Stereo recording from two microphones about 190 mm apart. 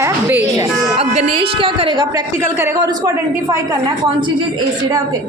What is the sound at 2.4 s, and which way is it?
A woman's voice, 15° right (ahead or behind).